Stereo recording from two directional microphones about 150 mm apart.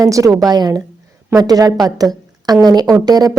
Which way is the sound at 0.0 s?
20° right (ahead or behind).